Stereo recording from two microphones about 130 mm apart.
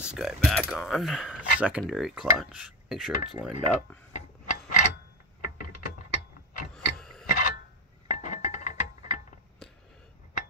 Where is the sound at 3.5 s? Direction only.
70° left (ahead or behind).